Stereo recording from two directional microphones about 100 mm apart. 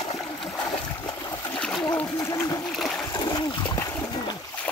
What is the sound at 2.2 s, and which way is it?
Splash, 30° left (ahead or behind).